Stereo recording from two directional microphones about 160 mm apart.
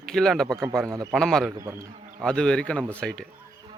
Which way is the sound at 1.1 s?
Centre (ahead or behind).